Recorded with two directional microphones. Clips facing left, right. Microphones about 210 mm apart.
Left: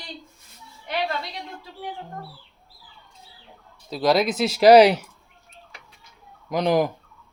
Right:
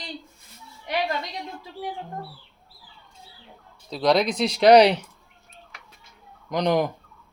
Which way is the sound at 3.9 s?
5° left (ahead or behind).